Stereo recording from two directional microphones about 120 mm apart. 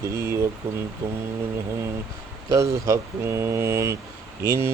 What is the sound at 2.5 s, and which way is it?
Speech, 25° right (ahead or behind).